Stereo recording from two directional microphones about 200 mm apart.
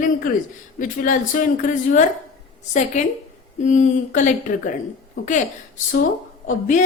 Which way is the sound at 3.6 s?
40° left (ahead or behind).